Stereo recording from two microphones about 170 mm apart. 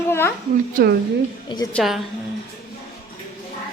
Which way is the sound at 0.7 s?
60° right (ahead or behind).